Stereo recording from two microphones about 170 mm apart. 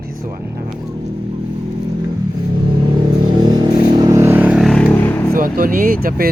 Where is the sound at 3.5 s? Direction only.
25° right (ahead or behind); by 4.7 s 10° right (ahead or behind).